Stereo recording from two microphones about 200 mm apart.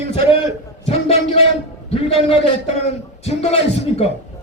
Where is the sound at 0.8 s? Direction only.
30° left (ahead or behind).